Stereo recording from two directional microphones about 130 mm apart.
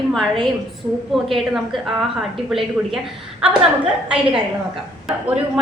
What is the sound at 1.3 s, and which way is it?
A woman's voice, centre (ahead or behind).